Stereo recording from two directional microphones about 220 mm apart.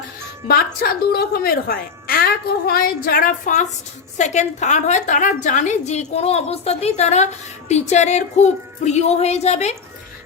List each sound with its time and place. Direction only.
0.4 s a woman's voice: 40° left (ahead or behind)